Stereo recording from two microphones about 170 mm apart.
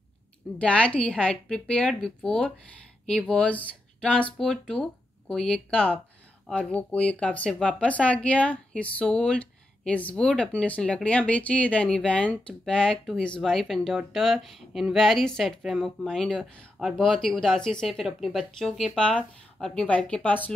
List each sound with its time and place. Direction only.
0.6 s speech: 5° left (ahead or behind)